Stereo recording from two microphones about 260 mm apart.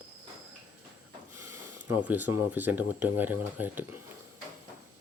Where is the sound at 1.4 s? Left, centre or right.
Centre.